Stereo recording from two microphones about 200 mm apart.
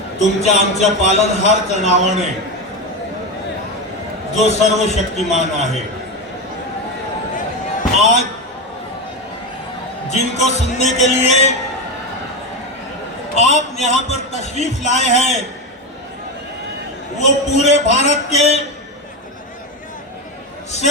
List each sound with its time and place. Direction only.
0.4 s a man's voice: 35° left (ahead or behind)
4.4 s a man's voice: 35° left (ahead or behind)
7.3 s basketball bounce: 40° left (ahead or behind)
10.1 s a man's voice: 35° left (ahead or behind)
13.3 s a man's voice: 35° left (ahead or behind)
17.2 s a man's voice: 35° left (ahead or behind)